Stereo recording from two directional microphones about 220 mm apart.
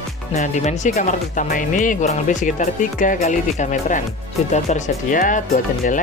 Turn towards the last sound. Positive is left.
turn(degrees=35)  # may be behind; listen again after turning